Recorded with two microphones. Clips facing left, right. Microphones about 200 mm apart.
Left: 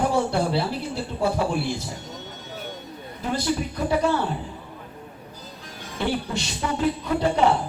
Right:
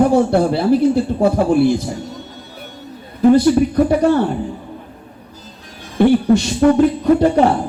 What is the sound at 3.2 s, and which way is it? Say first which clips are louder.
A man's voice: right 15 dB; 50° right (ahead or behind).